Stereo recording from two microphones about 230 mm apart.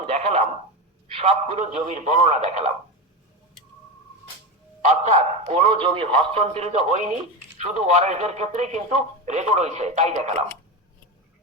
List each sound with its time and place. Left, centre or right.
0.0 s radio: right
1.1 s speech: right
4.9 s a man's voice: right